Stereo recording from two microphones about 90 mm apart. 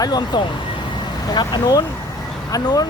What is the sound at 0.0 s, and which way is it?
Speech, 50° left (ahead or behind).